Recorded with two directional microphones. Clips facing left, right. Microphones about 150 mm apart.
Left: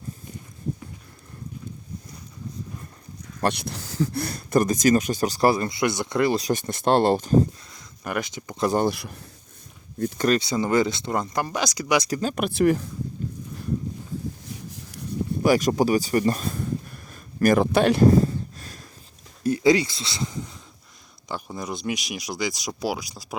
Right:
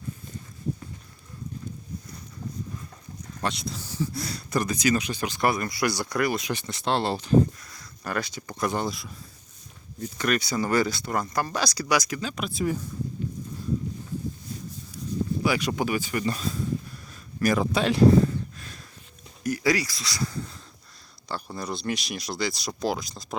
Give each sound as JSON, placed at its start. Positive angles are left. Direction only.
{"t": 3.4, "sound": "speech", "side_deg": 65}
{"t": 7.7, "sound": "speech", "side_deg": 20}
{"t": 8.9, "sound": "speech", "side_deg": 65}
{"t": 10.2, "sound": "speech", "side_deg": 25}
{"t": 12.1, "sound": "speech", "side_deg": 50}
{"t": 14.7, "sound": "a sound", "side_deg": 80}
{"t": 15.4, "sound": "speech", "side_deg": 45}
{"t": 17.4, "sound": "a sound", "side_deg": 55}
{"t": 19.4, "sound": "speech", "side_deg": 25}